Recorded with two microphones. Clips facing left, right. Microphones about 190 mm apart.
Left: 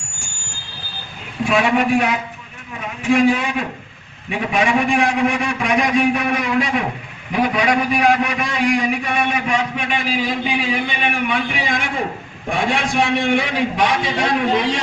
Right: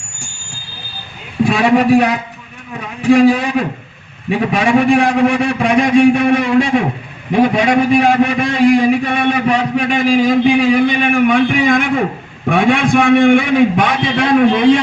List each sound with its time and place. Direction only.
1.5 s a man's voice: 35° right (ahead or behind); by 14.8 s 55° right (ahead or behind)